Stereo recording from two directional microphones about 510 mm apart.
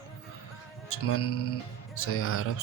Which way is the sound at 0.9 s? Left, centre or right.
Left.